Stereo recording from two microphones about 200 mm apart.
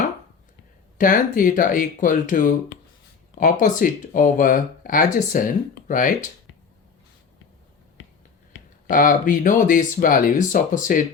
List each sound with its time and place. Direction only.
0.9 s speech: 40° left (ahead or behind)
8.9 s speech: 40° left (ahead or behind)